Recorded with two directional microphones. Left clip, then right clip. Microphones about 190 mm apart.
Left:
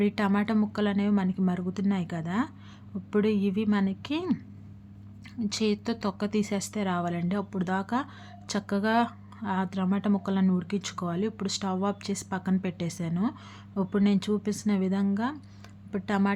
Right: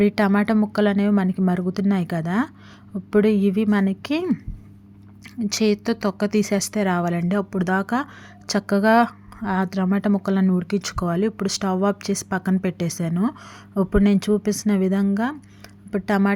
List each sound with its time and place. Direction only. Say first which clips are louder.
0.0 s speech: right 8 dB; 25° right (ahead or behind)
5.4 s speech: right 8 dB; 30° right (ahead or behind)